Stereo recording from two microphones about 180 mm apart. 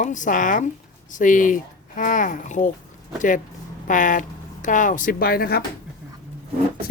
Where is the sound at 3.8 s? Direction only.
45° left (ahead or behind).